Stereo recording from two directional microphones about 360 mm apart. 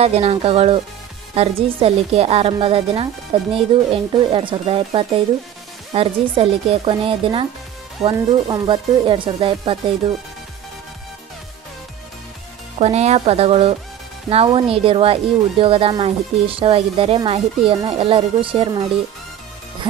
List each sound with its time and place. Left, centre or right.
0.0 s speech: centre
12.7 s speech: centre